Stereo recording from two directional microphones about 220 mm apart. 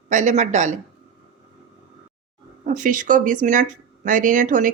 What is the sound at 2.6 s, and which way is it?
A woman's voice, 35° right (ahead or behind).